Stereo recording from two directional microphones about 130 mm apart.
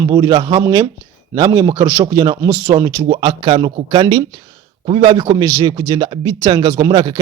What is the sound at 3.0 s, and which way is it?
A man's voice, 40° right (ahead or behind).